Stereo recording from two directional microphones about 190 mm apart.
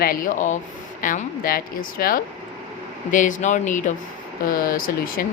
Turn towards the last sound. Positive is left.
turn(degrees=50)  # may be behind; listen again after turning